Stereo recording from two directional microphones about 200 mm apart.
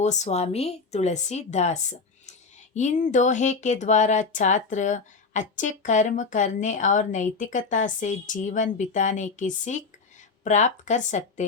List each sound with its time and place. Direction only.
0.0 s speech: 35° left (ahead or behind)